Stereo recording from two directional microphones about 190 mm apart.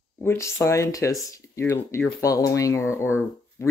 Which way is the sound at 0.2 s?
15° left (ahead or behind).